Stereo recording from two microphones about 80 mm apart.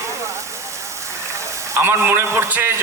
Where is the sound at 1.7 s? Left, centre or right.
Right.